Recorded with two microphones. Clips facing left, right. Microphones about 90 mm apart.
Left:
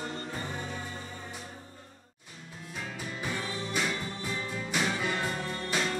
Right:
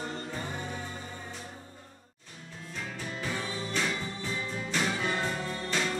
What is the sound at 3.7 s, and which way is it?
Music, 10° left (ahead or behind).